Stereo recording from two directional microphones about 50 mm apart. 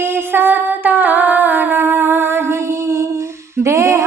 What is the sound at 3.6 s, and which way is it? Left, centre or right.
Music, right.